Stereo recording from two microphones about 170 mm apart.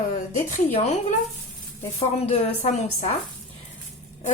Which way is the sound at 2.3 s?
40° left (ahead or behind).